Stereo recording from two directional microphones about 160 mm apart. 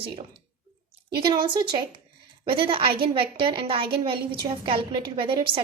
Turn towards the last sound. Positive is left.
turn(degrees=-30)  # may be behind; listen again after turning